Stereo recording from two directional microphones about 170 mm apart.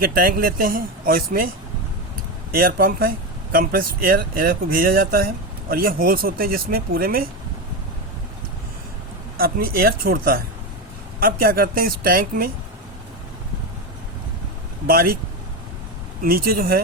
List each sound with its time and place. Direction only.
0.0 s speech: 60° right (ahead or behind)
2.5 s speech: 60° right (ahead or behind)
9.4 s speech: 60° right (ahead or behind)
16.2 s speech: 60° right (ahead or behind)